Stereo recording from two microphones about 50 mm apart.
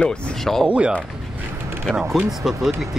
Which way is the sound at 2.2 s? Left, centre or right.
Centre.